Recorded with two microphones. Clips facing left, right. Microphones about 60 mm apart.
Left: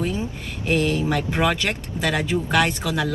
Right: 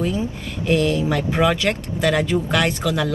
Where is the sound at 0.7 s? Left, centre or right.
Left.